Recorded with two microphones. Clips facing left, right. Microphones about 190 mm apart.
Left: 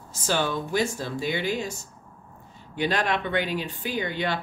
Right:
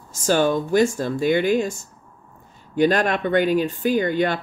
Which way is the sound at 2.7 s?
45° right (ahead or behind).